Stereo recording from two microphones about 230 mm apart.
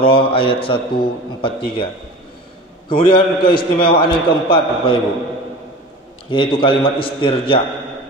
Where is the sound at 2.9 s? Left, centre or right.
Left.